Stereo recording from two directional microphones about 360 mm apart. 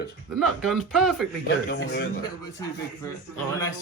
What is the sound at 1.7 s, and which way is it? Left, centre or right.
Speech, left.